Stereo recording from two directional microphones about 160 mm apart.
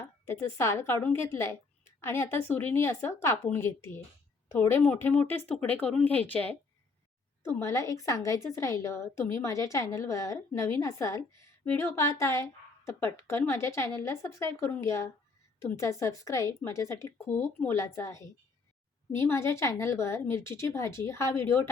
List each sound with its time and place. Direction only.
0.0 s a woman's voice: 15° left (ahead or behind)
7.6 s a woman's voice: 20° left (ahead or behind)